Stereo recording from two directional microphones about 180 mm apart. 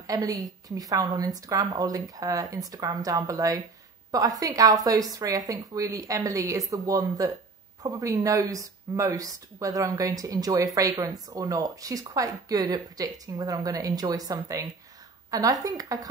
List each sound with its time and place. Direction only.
0.0 s speech: 20° right (ahead or behind)